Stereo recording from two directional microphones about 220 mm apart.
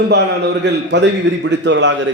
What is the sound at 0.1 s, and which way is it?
A man's voice, 50° right (ahead or behind).